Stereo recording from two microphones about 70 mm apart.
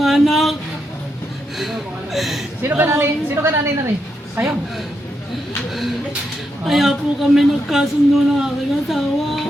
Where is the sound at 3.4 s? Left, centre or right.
Right.